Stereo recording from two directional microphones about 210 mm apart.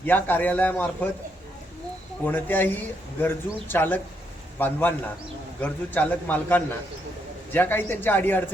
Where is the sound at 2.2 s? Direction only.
10° left (ahead or behind).